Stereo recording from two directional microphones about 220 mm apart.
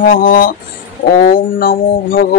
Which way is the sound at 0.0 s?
40° left (ahead or behind).